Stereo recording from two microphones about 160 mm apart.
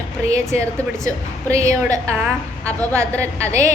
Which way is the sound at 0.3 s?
20° right (ahead or behind).